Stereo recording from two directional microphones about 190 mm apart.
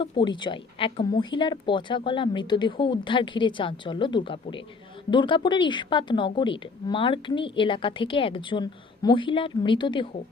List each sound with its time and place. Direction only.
0.0 s a woman's voice: 25° left (ahead or behind)